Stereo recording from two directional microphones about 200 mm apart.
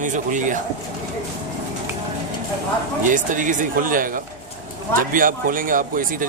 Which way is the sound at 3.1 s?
40° right (ahead or behind).